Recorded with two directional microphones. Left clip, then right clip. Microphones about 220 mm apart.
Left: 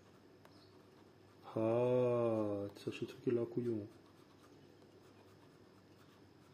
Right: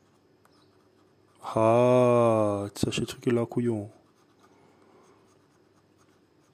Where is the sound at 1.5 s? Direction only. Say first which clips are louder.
Right 13 dB; 45° right (ahead or behind).